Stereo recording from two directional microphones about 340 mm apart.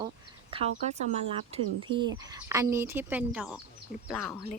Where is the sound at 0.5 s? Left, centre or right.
Centre.